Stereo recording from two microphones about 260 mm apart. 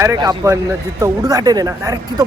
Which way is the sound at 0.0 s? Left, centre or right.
Centre.